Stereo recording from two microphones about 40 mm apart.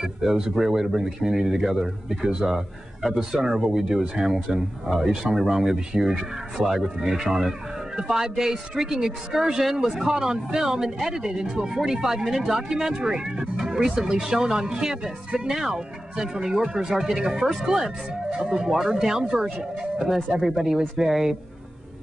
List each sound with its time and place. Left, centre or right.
0.0 s speech: centre
2.5 s a man's voice: centre